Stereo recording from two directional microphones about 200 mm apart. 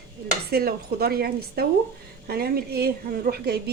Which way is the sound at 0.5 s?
50° right (ahead or behind).